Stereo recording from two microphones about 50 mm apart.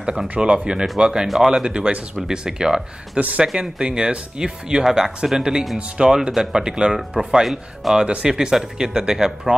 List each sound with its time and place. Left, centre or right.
0.4 s speech: centre
3.2 s speech: right
3.5 s speech: centre
8.0 s speech: centre